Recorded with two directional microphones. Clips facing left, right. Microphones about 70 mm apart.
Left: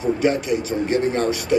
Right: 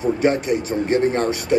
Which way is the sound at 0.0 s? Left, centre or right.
Right.